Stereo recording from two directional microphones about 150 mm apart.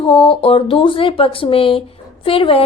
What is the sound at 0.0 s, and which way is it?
A woman's voice, 40° left (ahead or behind).